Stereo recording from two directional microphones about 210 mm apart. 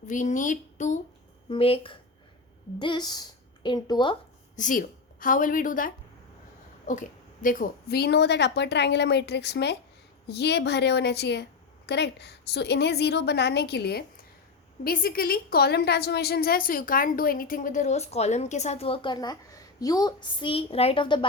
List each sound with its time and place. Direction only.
0.1 s a woman's voice: 35° left (ahead or behind); by 4.2 s 20° left (ahead or behind)
4.5 s a woman's voice: 40° left (ahead or behind); by 21.2 s 25° left (ahead or behind)